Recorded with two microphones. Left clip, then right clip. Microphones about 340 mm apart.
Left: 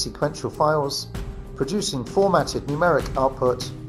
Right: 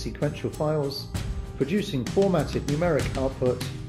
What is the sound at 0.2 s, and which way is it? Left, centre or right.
Speech, left.